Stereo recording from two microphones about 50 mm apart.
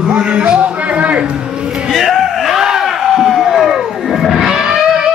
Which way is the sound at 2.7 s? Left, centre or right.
Centre.